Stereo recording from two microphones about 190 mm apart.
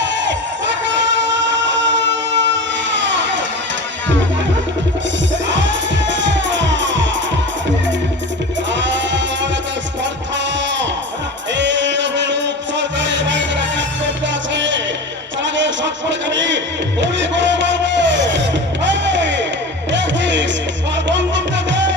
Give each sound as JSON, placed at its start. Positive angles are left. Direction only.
{"t": 0.0, "sound": "crowd", "side_deg": -70}
{"t": 1.5, "sound": "a sound", "side_deg": -70}
{"t": 5.5, "sound": "music", "side_deg": -70}
{"t": 8.7, "sound": "music", "side_deg": -70}
{"t": 11.5, "sound": "music", "side_deg": -70}
{"t": 15.5, "sound": "a sound", "side_deg": -70}
{"t": 17.0, "sound": "music", "side_deg": -70}